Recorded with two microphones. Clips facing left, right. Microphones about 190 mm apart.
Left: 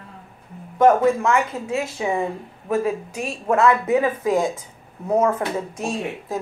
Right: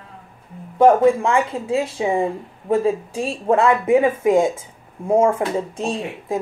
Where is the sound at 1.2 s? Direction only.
30° right (ahead or behind).